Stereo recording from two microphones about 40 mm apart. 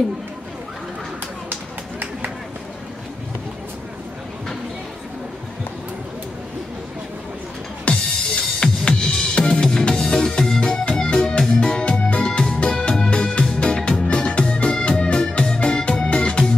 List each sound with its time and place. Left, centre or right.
7.9 s music: left
11.8 s music: left
13.9 s organ: left